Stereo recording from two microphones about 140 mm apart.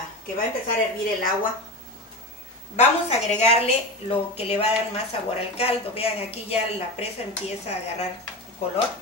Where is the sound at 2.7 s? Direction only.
50° left (ahead or behind).